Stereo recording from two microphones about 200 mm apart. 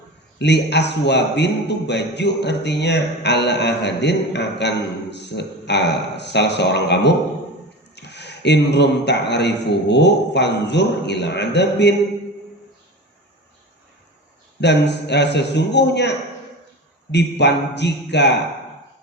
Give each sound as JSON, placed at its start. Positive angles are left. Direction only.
{"t": 0.3, "sound": "a man's voice", "side_deg": 60}
{"t": 14.6, "sound": "a man's voice", "side_deg": 60}